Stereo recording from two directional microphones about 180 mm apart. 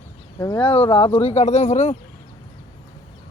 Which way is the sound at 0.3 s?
20° left (ahead or behind).